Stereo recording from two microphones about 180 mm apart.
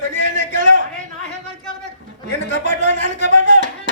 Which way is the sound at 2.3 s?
45° right (ahead or behind).